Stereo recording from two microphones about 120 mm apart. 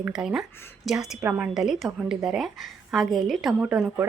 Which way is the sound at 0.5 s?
20° left (ahead or behind).